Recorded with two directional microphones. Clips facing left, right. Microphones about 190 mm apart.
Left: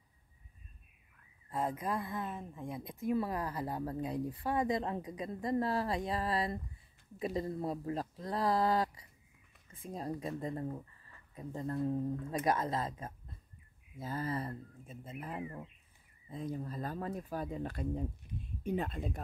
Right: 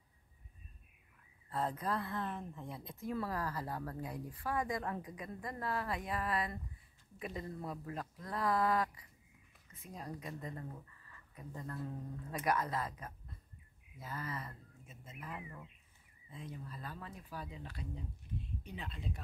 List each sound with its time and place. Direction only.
1.5 s a woman's voice: 10° left (ahead or behind); by 19.2 s 50° left (ahead or behind)